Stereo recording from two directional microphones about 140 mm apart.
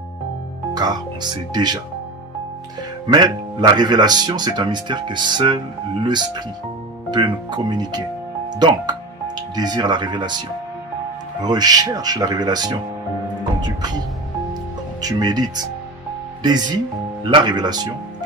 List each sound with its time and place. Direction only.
0.7 s speech: 30° right (ahead or behind)
3.1 s speech: 30° right (ahead or behind)
11.4 s speech: 30° right (ahead or behind)